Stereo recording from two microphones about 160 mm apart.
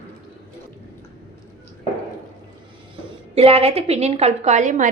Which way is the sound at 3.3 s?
40° right (ahead or behind).